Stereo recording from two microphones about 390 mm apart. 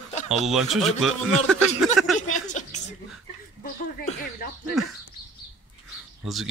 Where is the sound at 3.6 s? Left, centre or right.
Left.